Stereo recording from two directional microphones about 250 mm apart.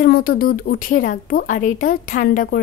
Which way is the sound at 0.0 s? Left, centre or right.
Left.